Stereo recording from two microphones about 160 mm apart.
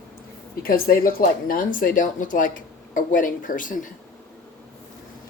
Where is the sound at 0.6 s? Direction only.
65° left (ahead or behind).